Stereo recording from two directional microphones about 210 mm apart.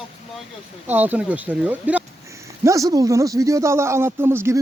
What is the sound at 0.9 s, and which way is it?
Speech, 10° right (ahead or behind).